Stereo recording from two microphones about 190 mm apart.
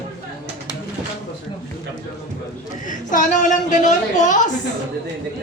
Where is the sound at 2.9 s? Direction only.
40° left (ahead or behind).